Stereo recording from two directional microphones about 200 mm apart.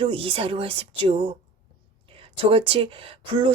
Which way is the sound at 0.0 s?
25° right (ahead or behind).